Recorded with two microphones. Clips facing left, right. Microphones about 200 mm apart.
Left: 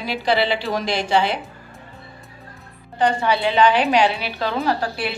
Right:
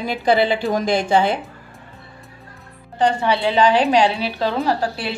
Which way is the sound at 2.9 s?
25° right (ahead or behind).